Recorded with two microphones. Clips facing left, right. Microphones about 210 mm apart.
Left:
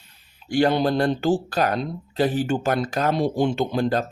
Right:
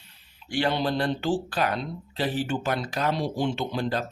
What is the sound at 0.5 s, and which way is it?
Speech, 45° left (ahead or behind).